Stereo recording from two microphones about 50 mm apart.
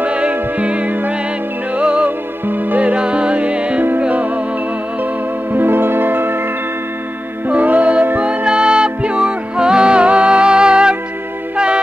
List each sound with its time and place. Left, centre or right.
0.0 s music: right
2.0 s music: right
2.8 s music: right
5.5 s music: right
7.4 s music: right
8.3 s music: centre